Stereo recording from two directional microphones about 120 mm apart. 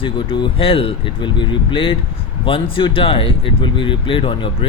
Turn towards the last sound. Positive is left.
turn(degrees=45)  # may be behind; listen again after turning